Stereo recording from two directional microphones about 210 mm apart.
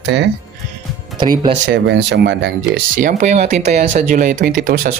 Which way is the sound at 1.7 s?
55° right (ahead or behind).